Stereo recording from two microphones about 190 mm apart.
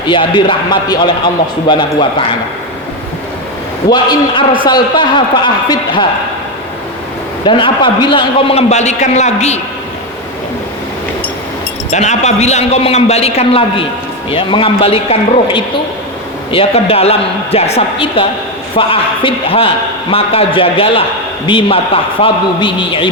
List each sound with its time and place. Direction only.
0.1 s a man's voice: 25° left (ahead or behind)
3.8 s a man's voice: 25° left (ahead or behind)
7.4 s a man's voice: 25° left (ahead or behind)
11.9 s a man's voice: 35° left (ahead or behind)